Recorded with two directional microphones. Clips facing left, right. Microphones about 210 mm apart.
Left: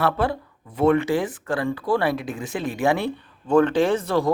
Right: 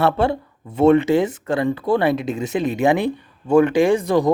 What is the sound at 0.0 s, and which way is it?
Speech, 25° right (ahead or behind).